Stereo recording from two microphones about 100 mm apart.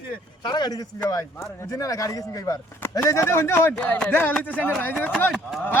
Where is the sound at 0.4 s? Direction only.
45° left (ahead or behind).